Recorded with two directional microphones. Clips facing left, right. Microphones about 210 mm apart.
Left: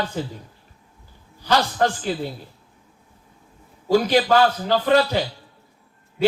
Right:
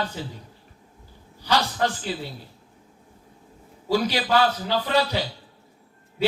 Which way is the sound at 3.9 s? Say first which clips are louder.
Left 5 dB; 50° left (ahead or behind).